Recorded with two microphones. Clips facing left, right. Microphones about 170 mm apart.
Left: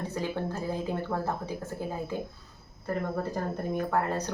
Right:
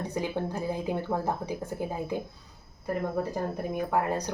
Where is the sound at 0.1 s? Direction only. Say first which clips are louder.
Right 1 dB; 15° right (ahead or behind).